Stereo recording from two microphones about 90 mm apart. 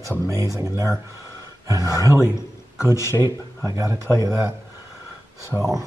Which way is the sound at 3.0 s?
35° left (ahead or behind).